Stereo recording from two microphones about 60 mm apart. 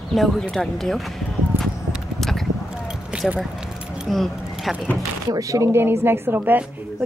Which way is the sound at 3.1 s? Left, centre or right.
Right.